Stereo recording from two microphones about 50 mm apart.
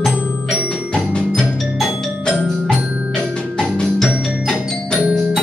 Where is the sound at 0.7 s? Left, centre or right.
Centre.